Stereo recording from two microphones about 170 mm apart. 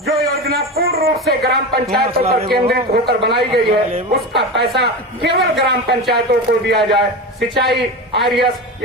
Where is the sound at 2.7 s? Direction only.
65° right (ahead or behind).